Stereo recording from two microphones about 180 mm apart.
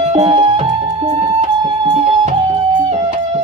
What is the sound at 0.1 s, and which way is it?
Music, 35° right (ahead or behind).